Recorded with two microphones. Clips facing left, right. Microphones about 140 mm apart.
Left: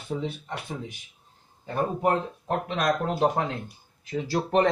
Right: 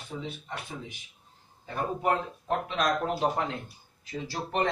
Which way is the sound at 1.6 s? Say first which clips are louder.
Left 3 dB; 45° left (ahead or behind).